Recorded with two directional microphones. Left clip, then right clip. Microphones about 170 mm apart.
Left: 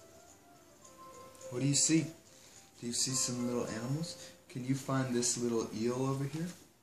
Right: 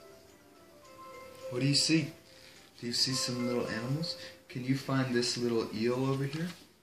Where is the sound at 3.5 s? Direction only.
10° left (ahead or behind).